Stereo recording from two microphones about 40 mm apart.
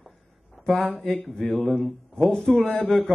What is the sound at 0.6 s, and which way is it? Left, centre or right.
A man's voice, centre.